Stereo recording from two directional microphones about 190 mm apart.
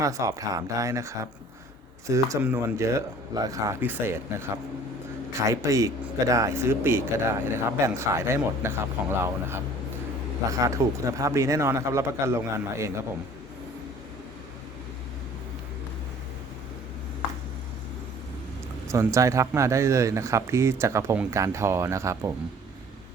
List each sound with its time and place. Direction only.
0.0 s speech: 15° right (ahead or behind)
5.5 s speech: 15° right (ahead or behind)
10.6 s speech: 15° right (ahead or behind)
18.9 s speech: 15° right (ahead or behind)